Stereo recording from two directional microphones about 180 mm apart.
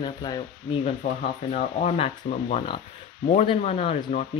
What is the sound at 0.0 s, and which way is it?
Speech, 25° left (ahead or behind).